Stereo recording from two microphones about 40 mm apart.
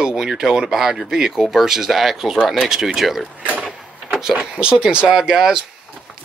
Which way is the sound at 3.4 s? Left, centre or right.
Right.